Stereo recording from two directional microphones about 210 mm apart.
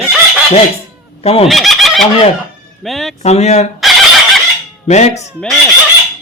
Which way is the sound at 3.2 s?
30° left (ahead or behind).